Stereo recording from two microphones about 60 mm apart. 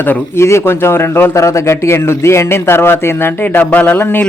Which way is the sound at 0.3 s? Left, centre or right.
Left.